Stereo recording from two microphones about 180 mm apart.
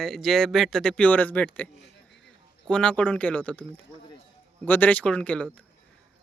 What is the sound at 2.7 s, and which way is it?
Speech, 5° left (ahead or behind).